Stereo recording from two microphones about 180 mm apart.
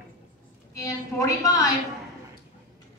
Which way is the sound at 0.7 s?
15° left (ahead or behind).